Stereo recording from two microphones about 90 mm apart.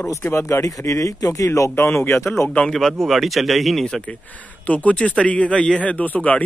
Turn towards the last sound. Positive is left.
turn(degrees=15)  # may be behind; listen again after turning